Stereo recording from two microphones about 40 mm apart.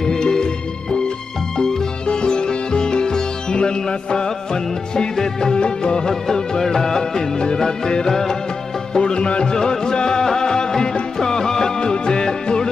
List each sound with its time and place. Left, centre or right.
0.0 s music: centre
1.6 s music: centre
2.0 s sitar: left
5.1 s music: centre
8.9 s music: left